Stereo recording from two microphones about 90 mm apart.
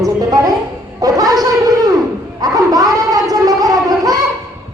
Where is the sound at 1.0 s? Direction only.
45° right (ahead or behind).